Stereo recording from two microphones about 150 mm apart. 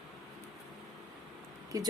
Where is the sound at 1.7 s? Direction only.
25° right (ahead or behind).